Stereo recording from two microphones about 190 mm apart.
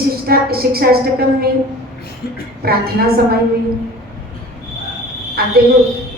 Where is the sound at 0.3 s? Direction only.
55° right (ahead or behind).